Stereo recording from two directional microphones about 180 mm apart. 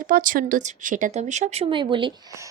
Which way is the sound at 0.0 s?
50° right (ahead or behind).